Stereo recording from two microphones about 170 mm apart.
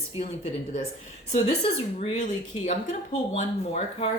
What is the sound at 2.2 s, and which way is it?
Speech, 45° left (ahead or behind).